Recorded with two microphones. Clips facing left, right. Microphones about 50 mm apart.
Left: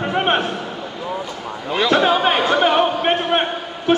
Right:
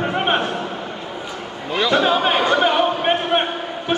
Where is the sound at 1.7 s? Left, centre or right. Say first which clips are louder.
Left 1 dB; centre.